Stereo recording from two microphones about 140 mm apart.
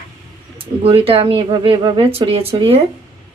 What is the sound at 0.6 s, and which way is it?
Speech, 40° right (ahead or behind).